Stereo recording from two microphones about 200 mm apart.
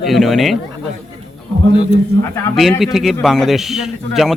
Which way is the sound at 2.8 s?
Centre (ahead or behind).